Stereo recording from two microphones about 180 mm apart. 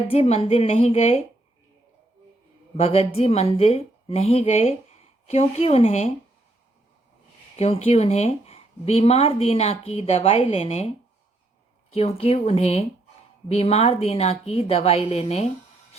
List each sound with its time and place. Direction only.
0.1 s speech: 35° left (ahead or behind)
2.7 s speech: 35° left (ahead or behind)
7.5 s speech: 35° left (ahead or behind)
11.9 s speech: 35° left (ahead or behind)